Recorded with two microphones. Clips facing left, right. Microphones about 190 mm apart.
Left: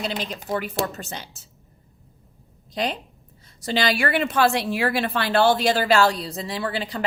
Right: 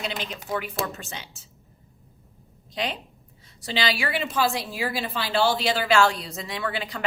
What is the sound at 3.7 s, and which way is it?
Speech, 50° left (ahead or behind).